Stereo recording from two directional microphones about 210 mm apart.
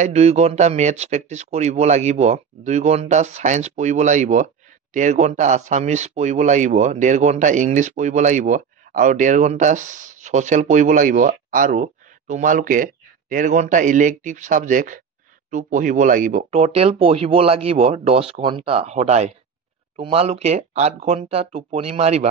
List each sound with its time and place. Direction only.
0.0 s speech: 30° right (ahead or behind)